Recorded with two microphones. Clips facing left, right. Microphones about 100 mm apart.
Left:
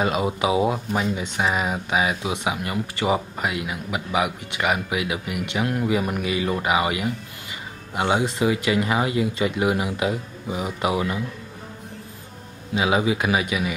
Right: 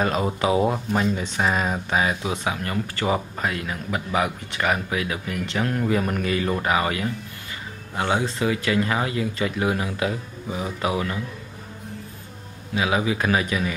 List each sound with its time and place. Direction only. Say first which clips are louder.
0.0 s speech: even; 10° left (ahead or behind)
12.7 s speech: left 2 dB; 20° left (ahead or behind)